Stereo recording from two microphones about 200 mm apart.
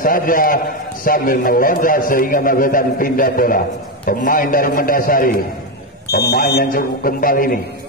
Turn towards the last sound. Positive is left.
turn(degrees=45)  # may be behind; listen again after turning